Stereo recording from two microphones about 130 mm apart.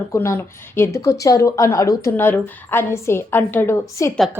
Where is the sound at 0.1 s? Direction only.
20° left (ahead or behind).